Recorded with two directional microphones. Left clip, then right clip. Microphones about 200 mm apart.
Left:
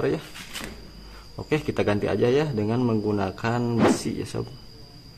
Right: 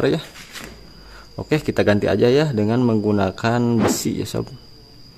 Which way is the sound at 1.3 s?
40° right (ahead or behind).